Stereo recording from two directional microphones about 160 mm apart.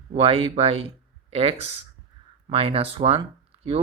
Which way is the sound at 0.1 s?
35° right (ahead or behind).